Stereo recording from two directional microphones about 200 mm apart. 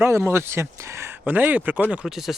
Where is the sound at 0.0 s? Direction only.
10° right (ahead or behind).